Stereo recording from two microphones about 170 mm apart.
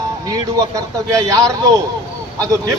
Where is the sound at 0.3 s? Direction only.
20° right (ahead or behind).